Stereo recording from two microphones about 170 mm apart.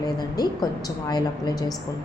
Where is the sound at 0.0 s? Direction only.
25° left (ahead or behind).